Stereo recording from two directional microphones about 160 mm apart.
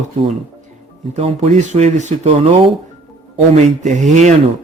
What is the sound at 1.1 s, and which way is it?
Speech, 40° right (ahead or behind).